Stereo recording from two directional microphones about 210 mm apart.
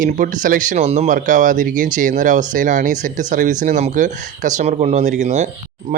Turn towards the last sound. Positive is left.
turn(degrees=-35)  # may be behind; listen again after turning